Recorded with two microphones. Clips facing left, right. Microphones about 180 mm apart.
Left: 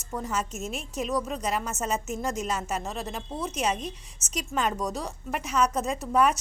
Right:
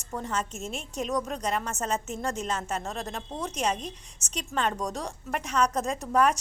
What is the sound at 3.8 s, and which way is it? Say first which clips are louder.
Speech: left 2 dB; 35° right (ahead or behind).